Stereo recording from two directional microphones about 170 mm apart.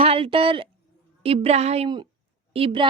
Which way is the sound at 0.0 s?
35° right (ahead or behind).